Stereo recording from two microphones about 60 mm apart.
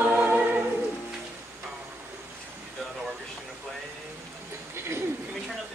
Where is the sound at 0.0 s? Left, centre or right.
Right.